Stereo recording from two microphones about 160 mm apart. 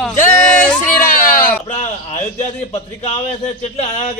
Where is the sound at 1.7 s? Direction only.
45° left (ahead or behind).